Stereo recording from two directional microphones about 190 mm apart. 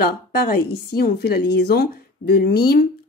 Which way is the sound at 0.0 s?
55° left (ahead or behind).